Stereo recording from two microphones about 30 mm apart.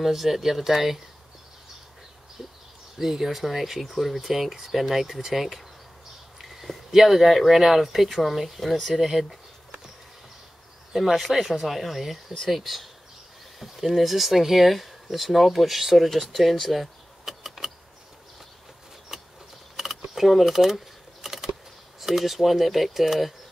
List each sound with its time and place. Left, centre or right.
0.0 s speech: centre
3.0 s speech: centre
6.6 s speech: centre
10.9 s speech: centre
11.1 s speech: centre
17.2 s power windows: centre
19.1 s power windows: centre
20.2 s speech: centre
21.2 s typing: centre
22.0 s speech: centre